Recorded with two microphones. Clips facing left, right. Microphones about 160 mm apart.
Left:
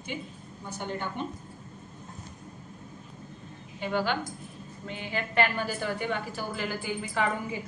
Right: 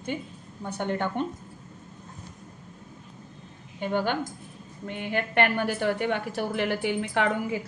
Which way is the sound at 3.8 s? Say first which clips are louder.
Right 2 dB; 50° right (ahead or behind).